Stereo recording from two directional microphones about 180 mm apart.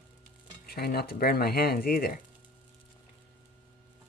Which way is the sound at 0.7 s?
60° left (ahead or behind).